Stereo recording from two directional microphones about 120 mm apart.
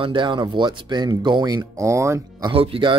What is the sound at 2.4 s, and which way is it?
Speech, 50° right (ahead or behind).